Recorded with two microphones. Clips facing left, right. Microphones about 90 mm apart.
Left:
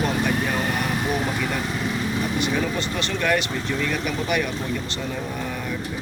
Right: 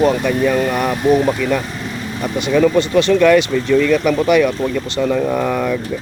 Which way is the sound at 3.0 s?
90° right.